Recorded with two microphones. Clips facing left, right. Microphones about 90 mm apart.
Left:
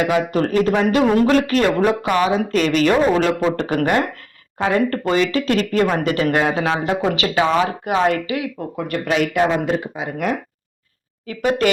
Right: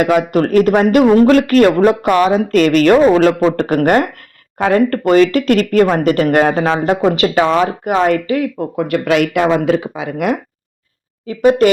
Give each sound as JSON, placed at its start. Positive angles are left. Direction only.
{"t": 0.2, "sound": "speech", "side_deg": -55}
{"t": 1.0, "sound": "speech", "side_deg": -40}
{"t": 4.5, "sound": "speech", "side_deg": -55}
{"t": 6.1, "sound": "speech", "side_deg": -40}
{"t": 8.7, "sound": "a man's voice", "side_deg": -65}
{"t": 11.3, "sound": "speech", "side_deg": -35}